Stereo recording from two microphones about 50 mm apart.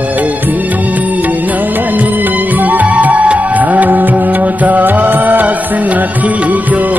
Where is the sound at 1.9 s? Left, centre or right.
Right.